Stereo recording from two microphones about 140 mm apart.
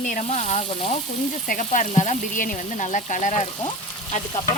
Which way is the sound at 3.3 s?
50° left (ahead or behind).